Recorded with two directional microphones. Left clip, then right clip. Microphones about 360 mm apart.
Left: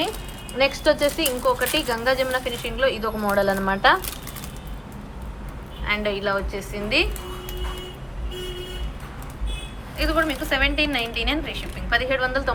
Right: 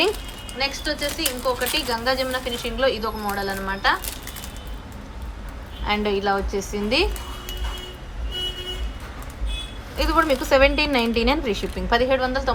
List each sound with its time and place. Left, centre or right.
0.6 s speech: centre
5.8 s speech: centre
10.0 s a woman's voice: centre